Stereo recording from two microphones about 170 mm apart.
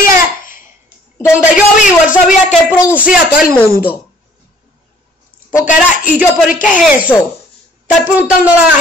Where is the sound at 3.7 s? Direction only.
60° left (ahead or behind).